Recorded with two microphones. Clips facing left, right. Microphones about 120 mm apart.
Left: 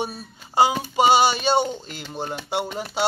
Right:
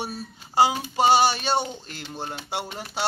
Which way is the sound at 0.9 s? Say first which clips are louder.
Left 2 dB; 15° left (ahead or behind).